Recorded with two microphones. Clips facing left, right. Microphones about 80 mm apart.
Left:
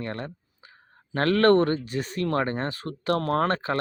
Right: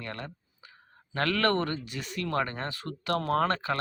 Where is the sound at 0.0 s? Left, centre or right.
Left.